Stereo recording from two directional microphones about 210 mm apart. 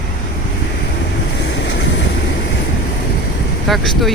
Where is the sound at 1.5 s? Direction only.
55° left (ahead or behind).